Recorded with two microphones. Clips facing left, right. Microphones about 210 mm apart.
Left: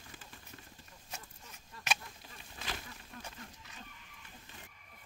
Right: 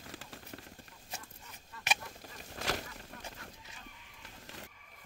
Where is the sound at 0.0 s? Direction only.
80° right.